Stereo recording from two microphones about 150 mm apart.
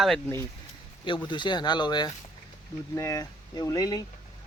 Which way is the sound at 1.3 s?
30° left (ahead or behind).